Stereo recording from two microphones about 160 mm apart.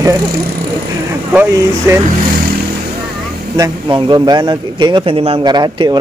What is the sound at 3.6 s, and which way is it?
A man's voice, 30° right (ahead or behind).